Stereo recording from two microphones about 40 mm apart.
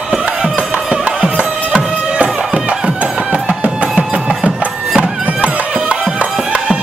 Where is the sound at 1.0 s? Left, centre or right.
Right.